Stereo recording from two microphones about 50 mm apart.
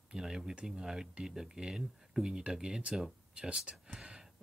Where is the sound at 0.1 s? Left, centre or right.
Centre.